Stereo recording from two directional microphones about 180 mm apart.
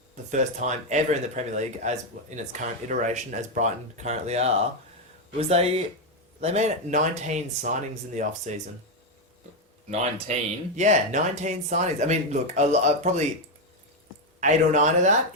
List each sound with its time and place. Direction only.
0.3 s speech: 40° right (ahead or behind)
10.3 s speech: 40° right (ahead or behind)
14.4 s speech: 40° right (ahead or behind)